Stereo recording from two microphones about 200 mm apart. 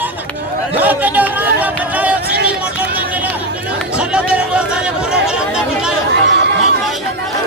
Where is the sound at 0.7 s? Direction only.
10° right (ahead or behind).